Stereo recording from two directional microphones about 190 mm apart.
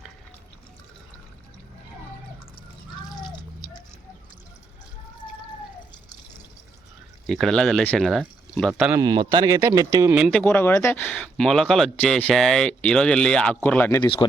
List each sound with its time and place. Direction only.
7.3 s speech: centre (ahead or behind)
8.8 s speech: 10° right (ahead or behind)
10.3 s speech: 10° left (ahead or behind)
14.0 s speech: 25° left (ahead or behind)